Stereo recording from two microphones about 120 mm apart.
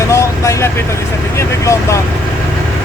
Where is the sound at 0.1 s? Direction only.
25° left (ahead or behind).